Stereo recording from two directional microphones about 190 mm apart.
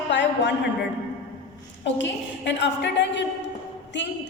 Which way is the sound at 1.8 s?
70° left (ahead or behind).